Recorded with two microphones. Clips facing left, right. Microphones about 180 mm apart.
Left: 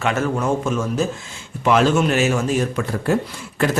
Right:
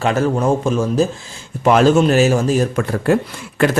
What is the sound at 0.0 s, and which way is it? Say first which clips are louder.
A man's voice: right 4 dB; 35° right (ahead or behind).